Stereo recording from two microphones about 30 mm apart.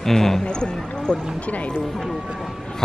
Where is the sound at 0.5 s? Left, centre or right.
Left.